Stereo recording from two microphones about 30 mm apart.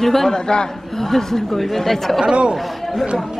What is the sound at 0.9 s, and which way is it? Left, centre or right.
Speech, centre.